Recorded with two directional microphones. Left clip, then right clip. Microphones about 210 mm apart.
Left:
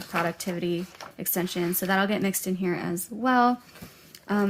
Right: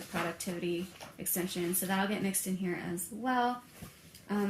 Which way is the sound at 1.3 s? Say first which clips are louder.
Left 7 dB; 35° left (ahead or behind).